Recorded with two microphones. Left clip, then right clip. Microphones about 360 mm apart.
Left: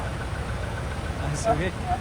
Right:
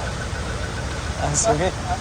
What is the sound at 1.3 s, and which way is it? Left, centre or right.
Speech, centre.